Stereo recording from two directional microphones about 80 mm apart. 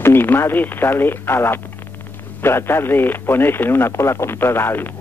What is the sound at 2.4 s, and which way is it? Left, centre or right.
Speech, left.